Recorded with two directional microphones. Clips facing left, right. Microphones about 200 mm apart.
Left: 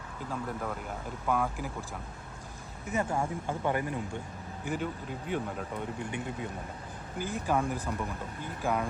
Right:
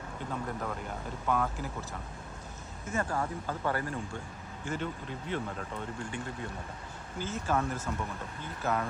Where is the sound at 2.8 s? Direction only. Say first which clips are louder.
Left 2 dB; 20° left (ahead or behind).